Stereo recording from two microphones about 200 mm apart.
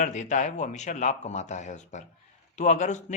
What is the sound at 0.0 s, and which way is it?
A man's voice, 35° left (ahead or behind).